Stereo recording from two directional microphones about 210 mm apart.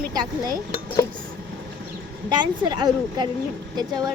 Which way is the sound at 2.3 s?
20° right (ahead or behind).